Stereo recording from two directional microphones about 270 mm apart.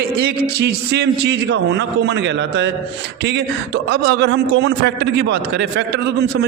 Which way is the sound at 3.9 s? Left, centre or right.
Right.